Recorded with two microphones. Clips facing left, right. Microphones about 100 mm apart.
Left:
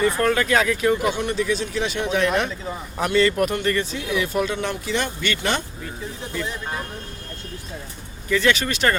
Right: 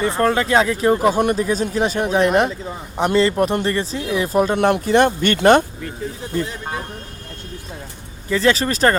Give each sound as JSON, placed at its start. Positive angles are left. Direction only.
{"t": 0.0, "sound": "speech", "side_deg": -30}
{"t": 4.5, "sound": "speech", "side_deg": -60}
{"t": 8.3, "sound": "speech", "side_deg": -35}